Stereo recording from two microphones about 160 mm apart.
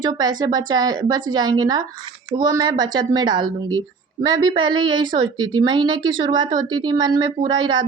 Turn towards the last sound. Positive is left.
turn(degrees=-30)  # may be behind; listen again after turning